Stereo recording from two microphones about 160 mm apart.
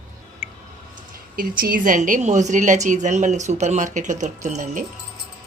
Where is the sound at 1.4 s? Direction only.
60° right (ahead or behind).